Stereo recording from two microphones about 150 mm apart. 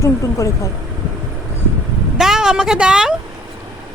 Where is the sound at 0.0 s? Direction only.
20° left (ahead or behind).